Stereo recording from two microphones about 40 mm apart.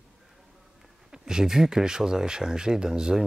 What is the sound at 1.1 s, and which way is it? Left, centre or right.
Speech, centre.